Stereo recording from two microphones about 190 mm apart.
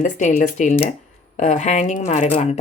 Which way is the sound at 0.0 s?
40° left (ahead or behind).